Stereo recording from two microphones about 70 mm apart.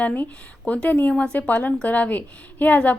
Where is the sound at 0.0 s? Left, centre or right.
Left.